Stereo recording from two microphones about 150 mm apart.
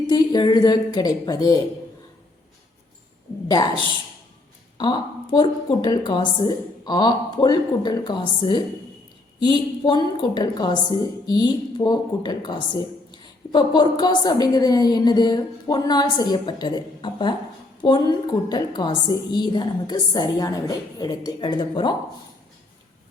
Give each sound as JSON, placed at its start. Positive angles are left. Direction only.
{"t": 0.1, "sound": "a woman's voice", "side_deg": 30}
{"t": 4.8, "sound": "a woman's voice", "side_deg": 30}